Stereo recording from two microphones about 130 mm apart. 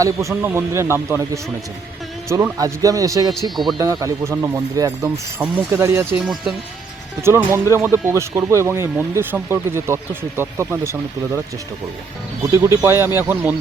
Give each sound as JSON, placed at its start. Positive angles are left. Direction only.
{"t": 0.0, "sound": "speech", "side_deg": -25}
{"t": 3.5, "sound": "speech", "side_deg": 0}
{"t": 3.8, "sound": "speech", "side_deg": -20}
{"t": 6.2, "sound": "speech", "side_deg": 0}
{"t": 7.2, "sound": "speech", "side_deg": -20}
{"t": 12.8, "sound": "speech", "side_deg": -20}